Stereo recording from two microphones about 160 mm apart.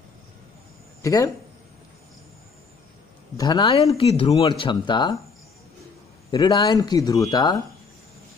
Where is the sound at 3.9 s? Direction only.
35° left (ahead or behind).